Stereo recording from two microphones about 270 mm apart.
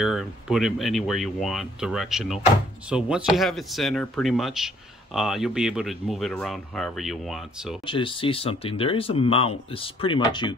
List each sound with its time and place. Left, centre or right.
0.0 s speech: centre
7.8 s speech: centre